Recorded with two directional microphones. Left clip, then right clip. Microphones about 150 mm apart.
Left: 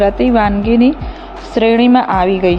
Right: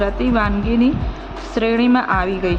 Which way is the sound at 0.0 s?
25° left (ahead or behind).